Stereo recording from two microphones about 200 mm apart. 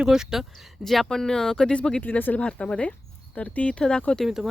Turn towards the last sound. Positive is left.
turn(degrees=0)  # may be behind; listen again after turning